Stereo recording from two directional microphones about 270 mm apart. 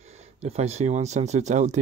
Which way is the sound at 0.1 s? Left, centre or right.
Right.